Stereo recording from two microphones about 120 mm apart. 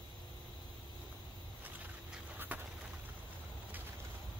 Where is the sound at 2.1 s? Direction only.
15° right (ahead or behind).